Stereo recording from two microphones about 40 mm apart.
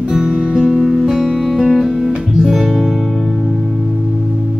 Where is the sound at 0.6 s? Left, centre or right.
Centre.